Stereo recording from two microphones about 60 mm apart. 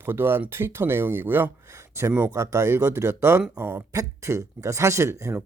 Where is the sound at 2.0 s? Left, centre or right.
Right.